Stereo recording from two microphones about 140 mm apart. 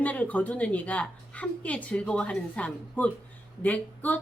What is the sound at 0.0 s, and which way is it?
Speech, 10° left (ahead or behind).